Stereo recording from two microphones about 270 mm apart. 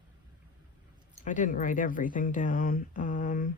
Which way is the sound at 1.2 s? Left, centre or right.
Left.